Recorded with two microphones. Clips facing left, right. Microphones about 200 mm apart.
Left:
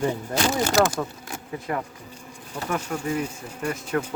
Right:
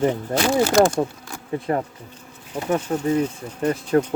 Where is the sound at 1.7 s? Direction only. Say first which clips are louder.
Right 5 dB; 35° right (ahead or behind).